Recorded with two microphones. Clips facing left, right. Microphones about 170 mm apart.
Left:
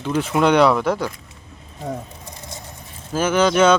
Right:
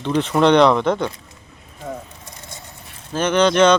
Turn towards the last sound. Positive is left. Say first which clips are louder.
# right 1 dB
turn(degrees=5)  # may be behind; listen again after turning